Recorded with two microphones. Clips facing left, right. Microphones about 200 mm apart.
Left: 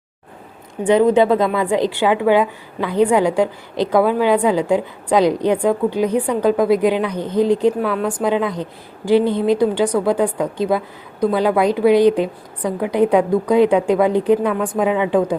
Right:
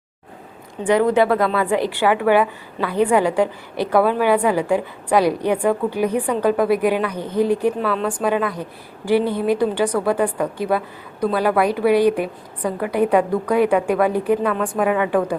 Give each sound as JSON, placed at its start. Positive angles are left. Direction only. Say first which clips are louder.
{"t": 0.9, "sound": "a woman's voice", "louder": "left 3 dB", "side_deg": 20}
{"t": 9.2, "sound": "a woman's voice", "louder": "left 3 dB", "side_deg": -10}
{"t": 9.6, "sound": "a woman's voice", "louder": "left 3 dB", "side_deg": 15}